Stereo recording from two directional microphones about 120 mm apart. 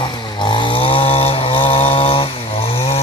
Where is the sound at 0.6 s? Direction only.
50° left (ahead or behind).